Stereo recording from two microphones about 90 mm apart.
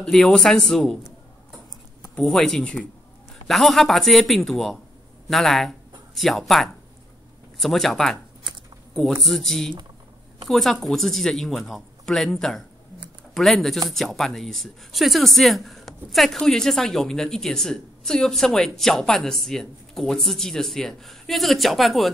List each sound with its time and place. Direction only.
0.0 s speech: 5° left (ahead or behind)
2.1 s speech: 5° left (ahead or behind)
9.2 s speech: centre (ahead or behind)